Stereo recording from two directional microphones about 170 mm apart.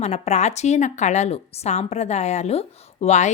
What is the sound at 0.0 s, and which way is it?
A woman's voice, 40° left (ahead or behind).